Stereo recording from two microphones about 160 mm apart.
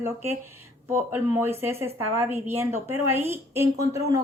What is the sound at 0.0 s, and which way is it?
A woman's voice, 15° right (ahead or behind).